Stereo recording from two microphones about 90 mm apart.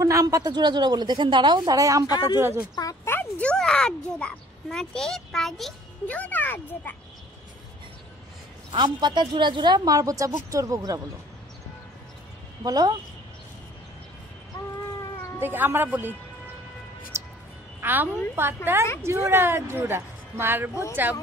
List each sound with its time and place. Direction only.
0.0 s a woman's voice: 40° right (ahead or behind); by 1.8 s 55° right (ahead or behind)
1.8 s speech: 40° right (ahead or behind)
2.0 s speech: 55° left (ahead or behind)
2.3 s speech: 30° right (ahead or behind)
2.7 s speech: 40° left (ahead or behind)
3.1 s a child's voice: 20° left (ahead or behind); by 5.8 s 5° left (ahead or behind)
6.0 s a child's voice: 15° left (ahead or behind)
8.7 s a woman's voice: 50° right (ahead or behind)
12.6 s a woman's voice: 45° right (ahead or behind)
15.4 s speech: 20° right (ahead or behind)
17.1 s music: 30° right (ahead or behind)
17.7 s a woman's voice: 20° right (ahead or behind)